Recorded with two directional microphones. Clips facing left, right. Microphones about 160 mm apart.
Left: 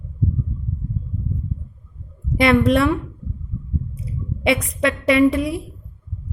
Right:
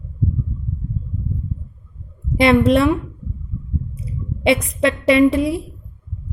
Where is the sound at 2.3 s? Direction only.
25° right (ahead or behind).